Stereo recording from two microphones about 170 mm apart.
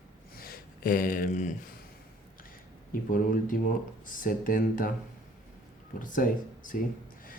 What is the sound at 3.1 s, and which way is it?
Speech, 55° left (ahead or behind).